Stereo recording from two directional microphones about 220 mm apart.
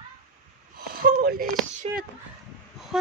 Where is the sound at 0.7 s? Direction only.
45° right (ahead or behind).